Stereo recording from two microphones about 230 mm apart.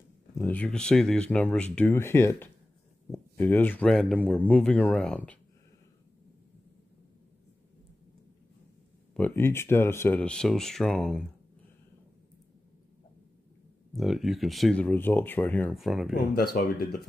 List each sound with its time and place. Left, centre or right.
0.4 s speech: centre
9.1 s speech: centre
13.9 s speech: centre
16.2 s speech: left